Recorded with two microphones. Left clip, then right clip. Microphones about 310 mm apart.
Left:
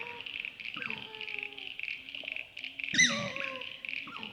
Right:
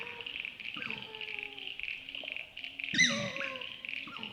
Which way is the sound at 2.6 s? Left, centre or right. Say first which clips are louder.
Left 2 dB; left.